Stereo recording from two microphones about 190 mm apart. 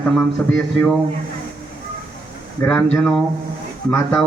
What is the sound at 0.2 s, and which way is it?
Speech, 10° left (ahead or behind).